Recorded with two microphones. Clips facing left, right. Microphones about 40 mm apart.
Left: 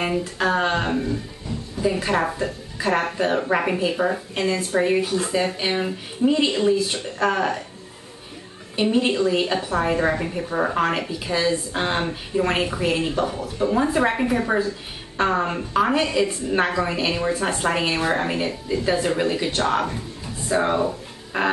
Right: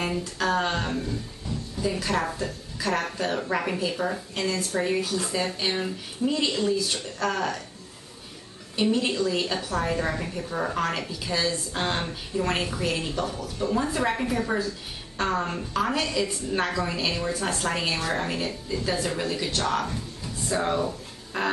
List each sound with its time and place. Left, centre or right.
0.0 s a woman's voice: left
8.7 s a woman's voice: left